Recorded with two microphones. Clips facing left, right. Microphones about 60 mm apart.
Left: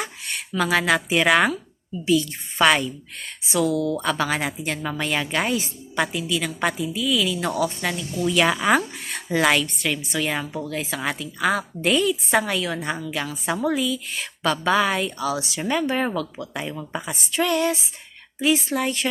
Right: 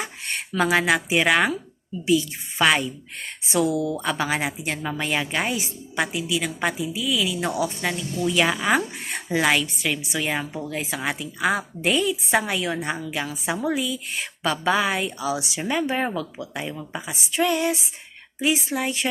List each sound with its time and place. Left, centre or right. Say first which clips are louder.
0.3 s a sound: right 2 dB; right
0.7 s a woman's voice: left 1 dB; centre
2.6 s a woman's voice: left 2 dB; centre
3.2 s a woman's voice: even; right; by 8.8 s centre
8.8 s a sound: right 1 dB; right
9.4 s a woman's voice: left 2 dB; centre
12.4 s a woman's voice: left 1 dB; right